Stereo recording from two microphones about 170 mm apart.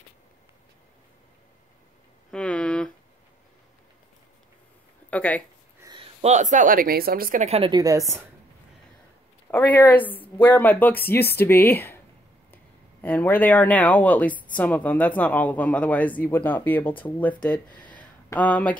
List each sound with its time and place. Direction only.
2.3 s a sound: 5° left (ahead or behind)
5.1 s speech: 10° left (ahead or behind)
5.8 s a sound: 25° right (ahead or behind)
6.2 s speech: 45° right (ahead or behind)
7.4 s a woman's voice: 35° right (ahead or behind)
7.7 s a woman's voice: 20° right (ahead or behind)
9.5 s speech: 10° left (ahead or behind)
13.0 s speech: 10° left (ahead or behind)
17.9 s a sound: 10° left (ahead or behind)